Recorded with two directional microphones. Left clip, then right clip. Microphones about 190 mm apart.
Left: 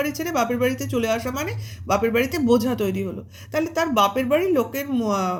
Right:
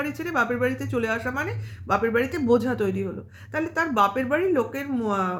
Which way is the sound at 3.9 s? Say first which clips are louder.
Left 3 dB; 10° right (ahead or behind).